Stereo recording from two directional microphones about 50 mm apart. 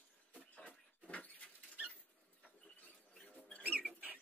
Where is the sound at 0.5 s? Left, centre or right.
Left.